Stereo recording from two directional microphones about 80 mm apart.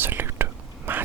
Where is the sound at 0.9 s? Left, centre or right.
Right.